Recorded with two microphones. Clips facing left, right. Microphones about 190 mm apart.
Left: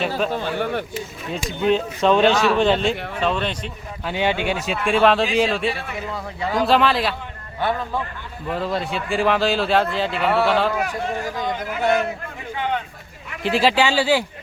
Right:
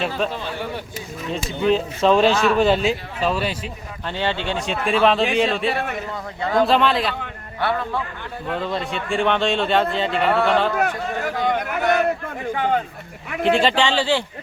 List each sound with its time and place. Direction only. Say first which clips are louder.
0.3 s a sound: left 5 dB; 55° left (ahead or behind)
1.5 s speech: even; centre (ahead or behind)
4.0 s speech: left 3 dB; 15° left (ahead or behind)
4.6 s speech: even; centre (ahead or behind)
8.4 s speech: left 1 dB; centre (ahead or behind)
10.8 s speech: right 1 dB; 65° right (ahead or behind)
12.5 s a sound: right 3 dB; 45° right (ahead or behind)
13.4 s speech: right 1 dB; 5° left (ahead or behind)